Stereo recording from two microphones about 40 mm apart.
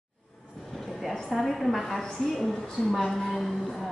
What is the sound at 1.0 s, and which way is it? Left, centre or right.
A woman's voice, centre.